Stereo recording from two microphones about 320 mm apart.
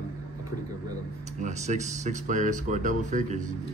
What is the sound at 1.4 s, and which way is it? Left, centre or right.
Speech, right.